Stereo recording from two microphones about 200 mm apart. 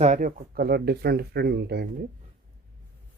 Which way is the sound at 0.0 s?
40° right (ahead or behind).